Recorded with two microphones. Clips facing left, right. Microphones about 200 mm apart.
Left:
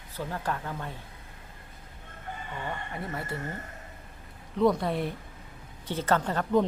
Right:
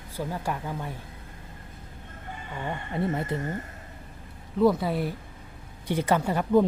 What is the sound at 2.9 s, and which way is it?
Speech, 20° right (ahead or behind).